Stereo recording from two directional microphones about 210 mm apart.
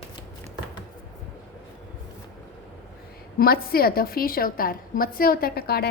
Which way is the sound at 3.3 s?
45° left (ahead or behind).